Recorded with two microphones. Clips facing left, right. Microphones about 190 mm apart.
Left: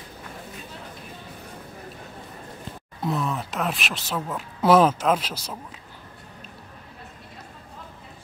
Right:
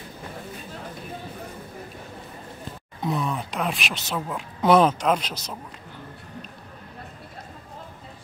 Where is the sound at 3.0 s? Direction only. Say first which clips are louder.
Even; centre (ahead or behind).